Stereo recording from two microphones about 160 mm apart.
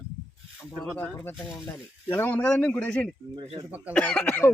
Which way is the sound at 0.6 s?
5° left (ahead or behind).